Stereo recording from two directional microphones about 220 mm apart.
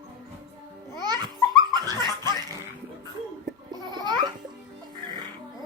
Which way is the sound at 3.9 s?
20° right (ahead or behind).